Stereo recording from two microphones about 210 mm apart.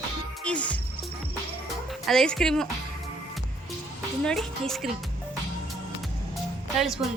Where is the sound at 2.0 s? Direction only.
Centre (ahead or behind).